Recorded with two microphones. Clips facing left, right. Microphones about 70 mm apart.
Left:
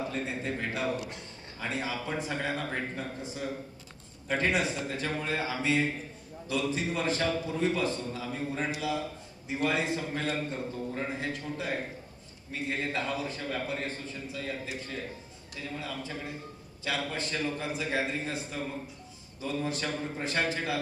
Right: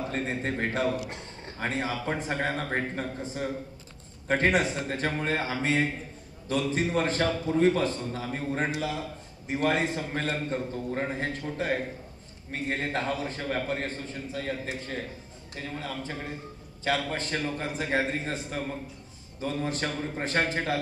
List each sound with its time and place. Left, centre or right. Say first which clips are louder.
0.1 s a man's voice: right 3 dB; right
1.0 s a man's voice: right 3 dB; right
1.6 s a man's voice: right 3 dB; right